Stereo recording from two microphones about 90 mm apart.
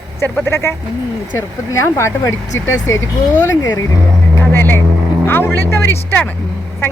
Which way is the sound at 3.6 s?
45° left (ahead or behind).